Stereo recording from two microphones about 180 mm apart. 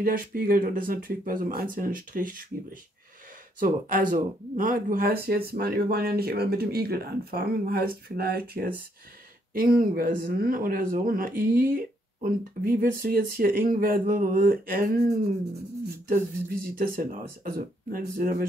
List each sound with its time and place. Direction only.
0.0 s speech: 55° right (ahead or behind)
3.5 s speech: 50° right (ahead or behind)
16.1 s speech: 50° right (ahead or behind)